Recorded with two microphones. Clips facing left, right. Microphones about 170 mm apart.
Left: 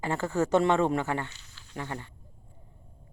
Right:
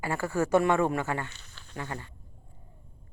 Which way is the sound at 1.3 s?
60° right (ahead or behind).